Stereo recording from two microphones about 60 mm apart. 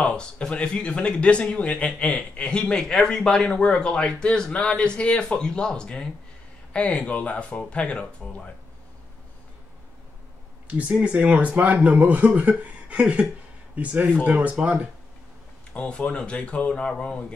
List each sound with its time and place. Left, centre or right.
0.0 s speech: centre
10.7 s speech: right
15.7 s speech: centre